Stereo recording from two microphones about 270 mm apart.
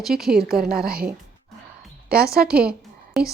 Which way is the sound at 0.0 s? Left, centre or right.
Centre.